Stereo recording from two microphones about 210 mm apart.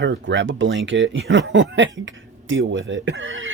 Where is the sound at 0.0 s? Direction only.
60° right (ahead or behind).